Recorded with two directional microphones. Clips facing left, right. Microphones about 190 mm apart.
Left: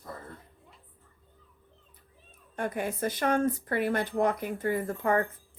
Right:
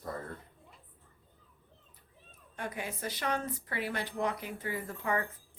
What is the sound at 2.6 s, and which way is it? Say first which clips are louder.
Speech: left 8 dB; 50° left (ahead or behind).